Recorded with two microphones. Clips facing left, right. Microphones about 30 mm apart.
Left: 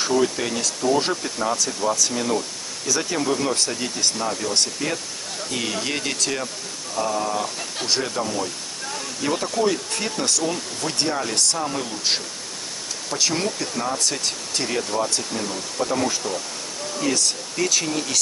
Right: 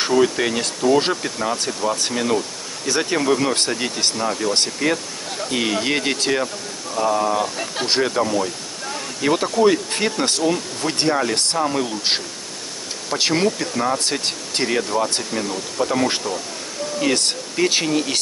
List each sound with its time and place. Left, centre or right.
0.0 s speech: right
4.2 s speech: centre
7.0 s speech: centre
7.8 s speech: right
8.1 s speech: right
13.3 s speech: right
14.2 s speech: right
14.8 s speech: centre
17.0 s speech: right
17.8 s speech: right